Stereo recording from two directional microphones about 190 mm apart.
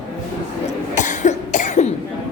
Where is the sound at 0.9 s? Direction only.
40° left (ahead or behind).